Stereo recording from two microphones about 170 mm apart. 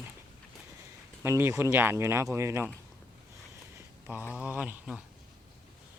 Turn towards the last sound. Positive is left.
turn(degrees=-5)  # may be behind; listen again after turning